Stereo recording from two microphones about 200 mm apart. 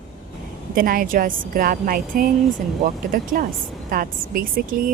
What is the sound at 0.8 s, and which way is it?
A woman's voice, 45° right (ahead or behind).